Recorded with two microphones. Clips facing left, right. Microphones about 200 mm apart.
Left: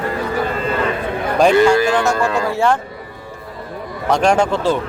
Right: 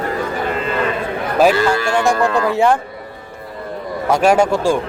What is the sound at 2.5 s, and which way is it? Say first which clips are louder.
Speech: right 3 dB; 15° right (ahead or behind).